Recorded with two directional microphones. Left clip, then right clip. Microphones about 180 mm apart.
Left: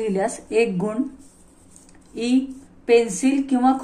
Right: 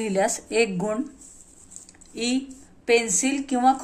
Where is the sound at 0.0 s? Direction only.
35° right (ahead or behind).